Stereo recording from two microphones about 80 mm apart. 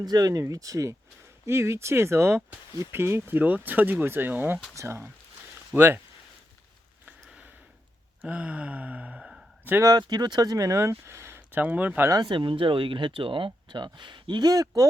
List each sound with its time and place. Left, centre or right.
0.0 s speech: right
4.7 s speech: right
8.2 s a sound: centre
10.0 s speech: right; by 12.0 s centre
12.1 s speech: right